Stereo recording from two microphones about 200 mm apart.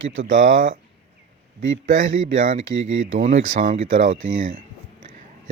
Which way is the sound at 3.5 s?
35° right (ahead or behind).